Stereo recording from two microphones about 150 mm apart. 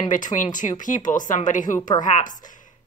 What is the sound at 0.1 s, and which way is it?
A woman's voice, 60° left (ahead or behind).